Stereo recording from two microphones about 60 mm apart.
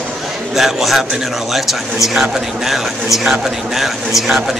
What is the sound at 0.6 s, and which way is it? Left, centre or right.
A man's voice, centre.